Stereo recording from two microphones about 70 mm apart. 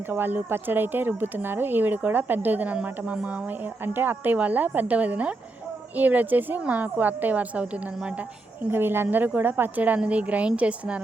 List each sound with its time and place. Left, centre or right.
0.1 s speech: right
3.8 s speech: right
8.7 s speech: right